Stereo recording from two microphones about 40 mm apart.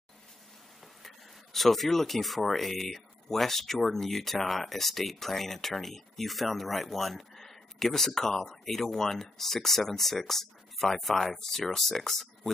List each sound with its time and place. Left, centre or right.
1.0 s speech: centre